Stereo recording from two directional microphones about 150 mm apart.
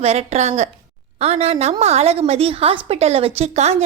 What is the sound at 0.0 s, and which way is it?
A woman's voice, 45° right (ahead or behind).